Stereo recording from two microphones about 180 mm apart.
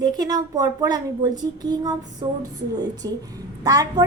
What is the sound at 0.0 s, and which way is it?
A woman's voice, 20° right (ahead or behind).